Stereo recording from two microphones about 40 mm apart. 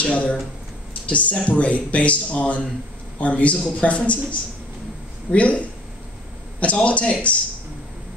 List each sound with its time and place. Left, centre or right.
0.0 s speech: left
1.3 s speech: left
5.3 s speech: left
6.6 s speech: left